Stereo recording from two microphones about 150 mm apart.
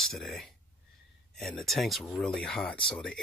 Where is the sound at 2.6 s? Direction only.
35° left (ahead or behind).